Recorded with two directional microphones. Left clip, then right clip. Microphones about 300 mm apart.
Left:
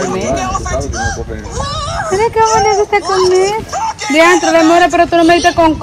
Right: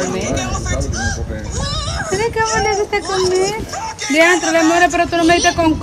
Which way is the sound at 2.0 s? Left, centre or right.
Centre.